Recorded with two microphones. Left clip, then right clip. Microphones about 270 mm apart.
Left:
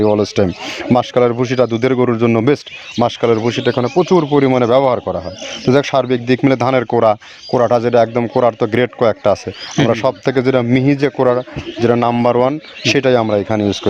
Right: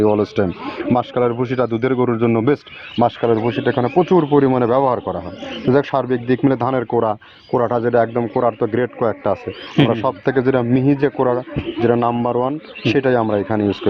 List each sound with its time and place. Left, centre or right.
0.0 s speech: left